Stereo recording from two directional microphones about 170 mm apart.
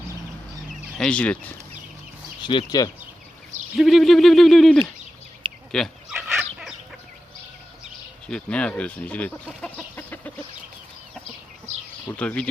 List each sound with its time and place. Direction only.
0.9 s speech: 5° left (ahead or behind)
2.4 s speech: 25° left (ahead or behind)
3.8 s speech: centre (ahead or behind)
5.7 s fowl: centre (ahead or behind)
6.1 s chicken: 10° right (ahead or behind)
8.3 s speech: 5° left (ahead or behind)
9.9 s chicken: 10° left (ahead or behind)
11.7 s a sound: 40° right (ahead or behind)
12.0 s speech: 10° left (ahead or behind)